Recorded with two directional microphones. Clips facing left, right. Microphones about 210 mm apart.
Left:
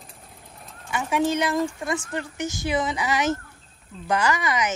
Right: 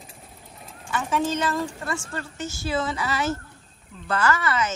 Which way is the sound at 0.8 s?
15° left (ahead or behind).